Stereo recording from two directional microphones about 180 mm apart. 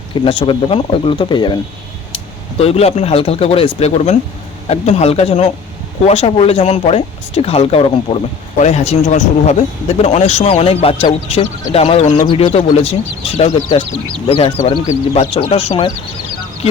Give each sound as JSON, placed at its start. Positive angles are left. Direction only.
{"t": 0.1, "sound": "speech", "side_deg": 30}